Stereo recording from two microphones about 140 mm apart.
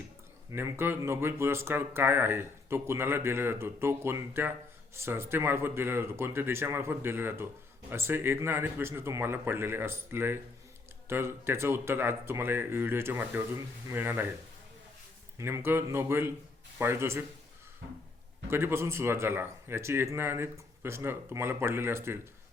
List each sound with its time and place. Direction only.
0.5 s speech: 15° right (ahead or behind)
15.4 s speech: 20° right (ahead or behind)
18.5 s speech: 15° right (ahead or behind)